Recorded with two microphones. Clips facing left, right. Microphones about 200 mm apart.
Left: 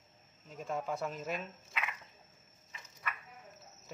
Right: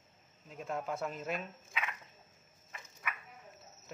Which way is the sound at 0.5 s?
Centre (ahead or behind).